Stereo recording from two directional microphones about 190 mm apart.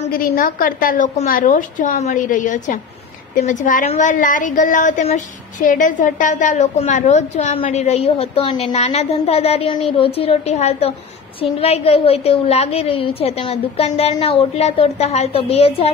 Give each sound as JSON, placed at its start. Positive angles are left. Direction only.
{"t": 0.2, "sound": "a woman's voice", "side_deg": 45}